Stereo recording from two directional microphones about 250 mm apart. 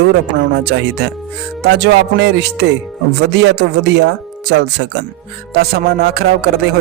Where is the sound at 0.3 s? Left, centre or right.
Right.